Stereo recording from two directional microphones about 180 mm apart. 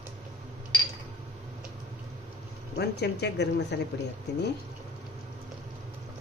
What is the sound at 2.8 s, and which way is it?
Speech, 70° left (ahead or behind).